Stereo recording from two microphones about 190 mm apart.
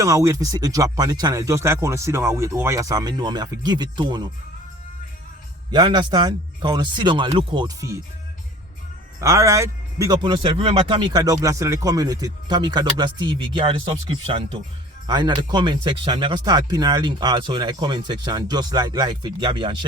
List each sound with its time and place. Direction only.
0.0 s speech: 15° right (ahead or behind)
5.7 s a man's voice: 25° right (ahead or behind)
9.2 s a man's voice: 15° right (ahead or behind)